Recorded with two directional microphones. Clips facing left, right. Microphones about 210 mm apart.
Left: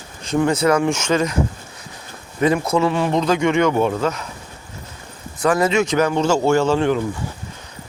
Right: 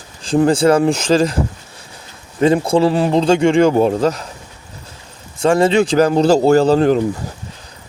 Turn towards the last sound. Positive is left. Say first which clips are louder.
# right 5 dB
turn(degrees=-35)  # may be behind; listen again after turning